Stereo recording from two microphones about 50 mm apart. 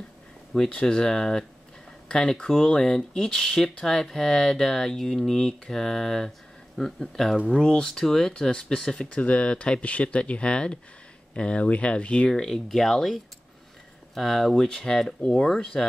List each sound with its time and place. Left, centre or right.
0.7 s speech: centre
9.1 s speech: left
12.3 s speech: centre